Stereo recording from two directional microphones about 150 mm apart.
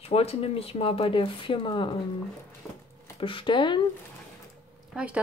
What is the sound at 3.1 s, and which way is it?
Speech, 35° left (ahead or behind).